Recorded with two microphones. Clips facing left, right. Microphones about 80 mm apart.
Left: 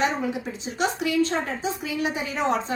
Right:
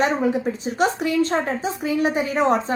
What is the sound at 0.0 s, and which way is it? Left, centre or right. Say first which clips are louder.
A woman's voice: right 5 dB; right.